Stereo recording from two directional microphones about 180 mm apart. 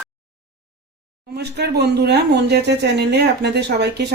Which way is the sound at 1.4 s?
65° right (ahead or behind).